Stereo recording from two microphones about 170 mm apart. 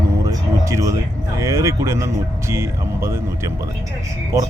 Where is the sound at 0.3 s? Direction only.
20° right (ahead or behind).